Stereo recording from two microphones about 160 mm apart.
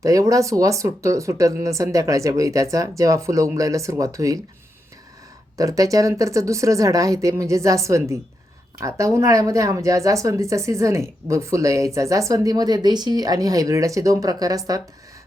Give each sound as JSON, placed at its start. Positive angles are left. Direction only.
{"t": 0.0, "sound": "speech", "side_deg": -20}
{"t": 5.5, "sound": "speech", "side_deg": -20}